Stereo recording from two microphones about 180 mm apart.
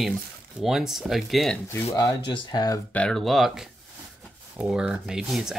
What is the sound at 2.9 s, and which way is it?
Speech, 5° left (ahead or behind).